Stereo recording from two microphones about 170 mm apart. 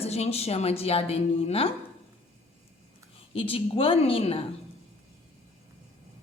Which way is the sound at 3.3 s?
35° left (ahead or behind).